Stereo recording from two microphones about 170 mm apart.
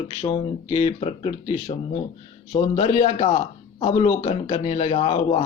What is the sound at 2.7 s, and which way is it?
A man's voice, 40° left (ahead or behind).